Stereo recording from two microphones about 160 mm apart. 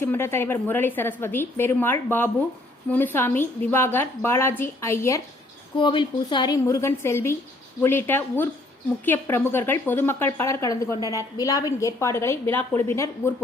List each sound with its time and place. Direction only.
0.0 s a woman's voice: 15° left (ahead or behind)
5.7 s a woman's voice: 30° left (ahead or behind)